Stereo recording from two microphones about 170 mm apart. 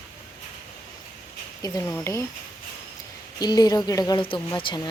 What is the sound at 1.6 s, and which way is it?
Speech, 20° left (ahead or behind).